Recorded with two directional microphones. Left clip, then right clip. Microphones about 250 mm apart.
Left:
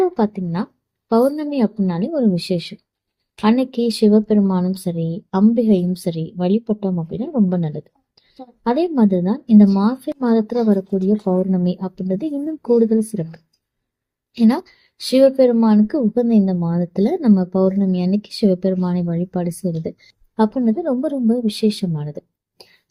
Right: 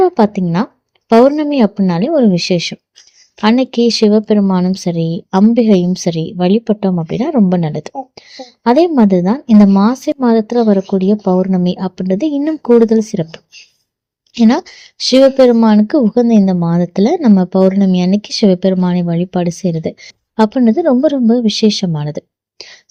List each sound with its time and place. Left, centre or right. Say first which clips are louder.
0.0 s speech: right 7 dB; right